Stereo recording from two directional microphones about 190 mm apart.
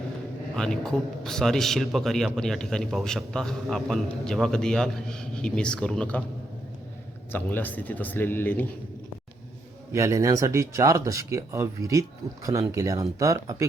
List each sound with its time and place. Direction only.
0.5 s a man's voice: 5° left (ahead or behind)
7.3 s speech: 10° left (ahead or behind)
9.9 s speech: 15° right (ahead or behind)